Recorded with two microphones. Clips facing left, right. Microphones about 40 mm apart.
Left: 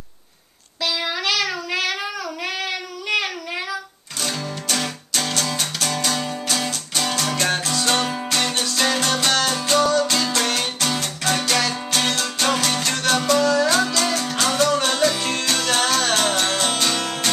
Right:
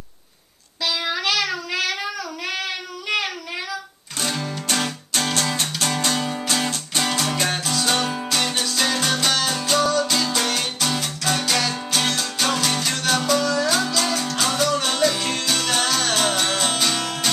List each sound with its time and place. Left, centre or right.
0.8 s child singing: centre
4.3 s music: centre
7.1 s music: centre
16.2 s music: centre